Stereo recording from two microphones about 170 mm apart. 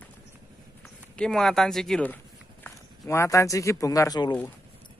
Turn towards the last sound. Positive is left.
turn(degrees=25)  # may be behind; listen again after turning